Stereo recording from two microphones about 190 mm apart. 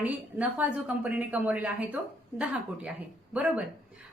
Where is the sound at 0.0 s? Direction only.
10° right (ahead or behind).